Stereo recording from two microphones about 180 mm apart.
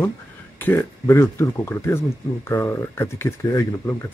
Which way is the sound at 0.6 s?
10° left (ahead or behind).